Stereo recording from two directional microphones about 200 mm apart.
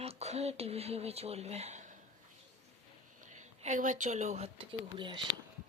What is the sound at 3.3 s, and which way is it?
Speech, 40° right (ahead or behind).